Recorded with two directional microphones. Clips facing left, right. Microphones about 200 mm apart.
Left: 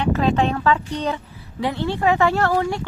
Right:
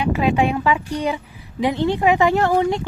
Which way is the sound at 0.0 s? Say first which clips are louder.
Right 1 dB; 10° right (ahead or behind).